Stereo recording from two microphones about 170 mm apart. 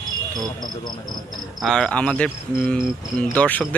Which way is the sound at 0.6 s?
25° left (ahead or behind).